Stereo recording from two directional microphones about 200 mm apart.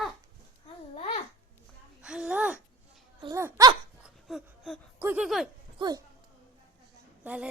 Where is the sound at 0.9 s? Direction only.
30° left (ahead or behind).